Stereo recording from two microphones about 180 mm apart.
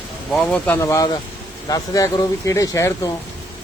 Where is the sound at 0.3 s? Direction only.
5° left (ahead or behind).